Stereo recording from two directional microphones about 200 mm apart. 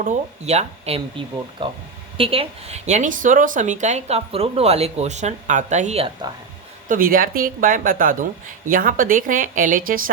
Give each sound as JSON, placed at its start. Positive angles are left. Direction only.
{"t": 0.0, "sound": "speech", "side_deg": -35}